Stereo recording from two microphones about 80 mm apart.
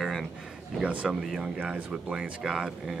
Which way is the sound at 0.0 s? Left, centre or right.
Centre.